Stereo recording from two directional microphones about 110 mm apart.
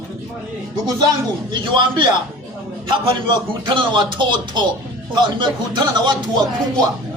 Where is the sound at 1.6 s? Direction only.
50° right (ahead or behind).